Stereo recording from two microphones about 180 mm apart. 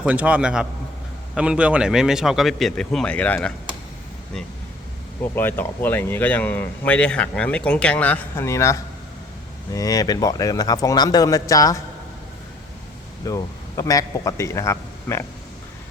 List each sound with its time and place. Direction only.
0.0 s a man's voice: 10° right (ahead or behind); by 3.5 s 10° left (ahead or behind)
5.2 s speech: 10° left (ahead or behind)
13.2 s a man's voice: 20° left (ahead or behind)